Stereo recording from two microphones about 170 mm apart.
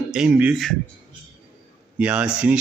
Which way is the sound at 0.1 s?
5° right (ahead or behind).